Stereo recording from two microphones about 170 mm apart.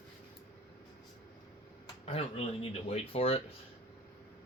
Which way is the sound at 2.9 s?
35° left (ahead or behind).